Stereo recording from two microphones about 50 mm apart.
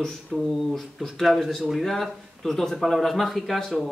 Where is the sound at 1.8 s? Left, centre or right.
Centre.